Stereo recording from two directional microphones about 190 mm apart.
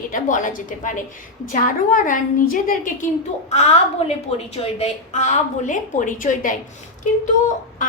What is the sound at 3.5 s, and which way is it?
A woman's voice, 35° left (ahead or behind).